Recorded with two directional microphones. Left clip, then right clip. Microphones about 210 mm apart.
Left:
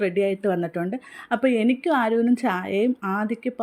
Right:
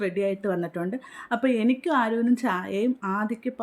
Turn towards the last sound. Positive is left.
turn(degrees=15)  # may be behind; listen again after turning